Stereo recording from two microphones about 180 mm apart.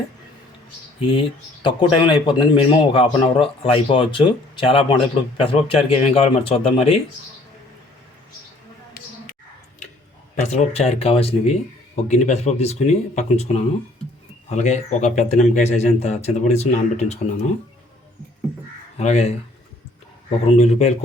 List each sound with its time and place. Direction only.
0.9 s a man's voice: 30° left (ahead or behind)
10.4 s a man's voice: 40° left (ahead or behind)
18.9 s a man's voice: 35° left (ahead or behind)
20.4 s a man's voice: 35° left (ahead or behind)